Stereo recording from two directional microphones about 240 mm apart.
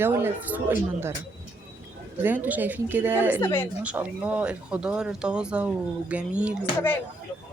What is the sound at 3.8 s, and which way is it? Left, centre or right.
Speech, centre.